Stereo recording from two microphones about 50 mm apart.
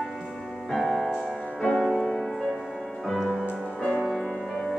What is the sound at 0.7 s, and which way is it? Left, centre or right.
Music, centre.